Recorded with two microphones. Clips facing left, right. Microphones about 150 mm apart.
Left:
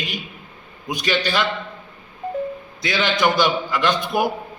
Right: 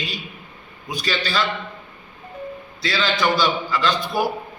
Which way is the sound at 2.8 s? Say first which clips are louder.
Left 2 dB; 20° left (ahead or behind).